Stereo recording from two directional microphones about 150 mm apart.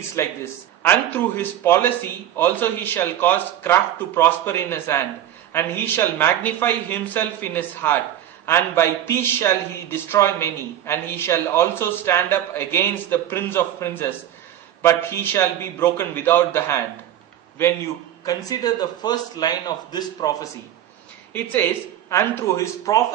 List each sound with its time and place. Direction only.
0.2 s a man's voice: 20° left (ahead or behind)
22.1 s a man's voice: 20° left (ahead or behind)